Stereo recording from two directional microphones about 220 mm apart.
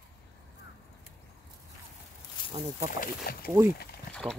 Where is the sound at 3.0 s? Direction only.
40° left (ahead or behind).